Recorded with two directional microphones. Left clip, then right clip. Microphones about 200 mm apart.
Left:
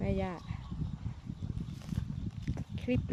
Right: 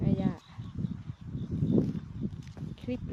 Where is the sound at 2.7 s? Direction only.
5° right (ahead or behind).